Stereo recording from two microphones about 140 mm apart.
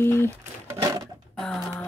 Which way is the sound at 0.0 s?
15° left (ahead or behind).